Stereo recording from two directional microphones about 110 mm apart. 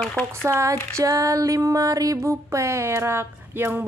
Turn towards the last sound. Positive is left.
turn(degrees=-20)  # may be behind; listen again after turning